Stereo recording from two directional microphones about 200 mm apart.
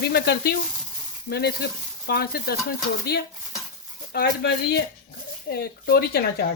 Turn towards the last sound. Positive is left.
turn(degrees=50)  # may be behind; listen again after turning